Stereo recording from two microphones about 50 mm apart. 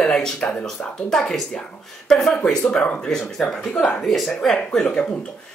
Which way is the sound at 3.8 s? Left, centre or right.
Left.